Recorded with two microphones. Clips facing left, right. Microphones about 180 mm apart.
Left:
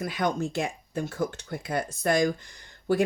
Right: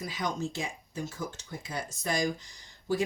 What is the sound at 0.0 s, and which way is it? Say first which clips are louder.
Speech: left 6 dB; 60° left (ahead or behind).